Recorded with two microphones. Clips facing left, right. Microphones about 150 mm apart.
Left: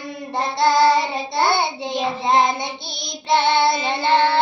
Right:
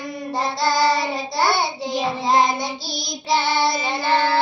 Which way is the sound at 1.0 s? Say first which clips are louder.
Left 1 dB; 25° left (ahead or behind).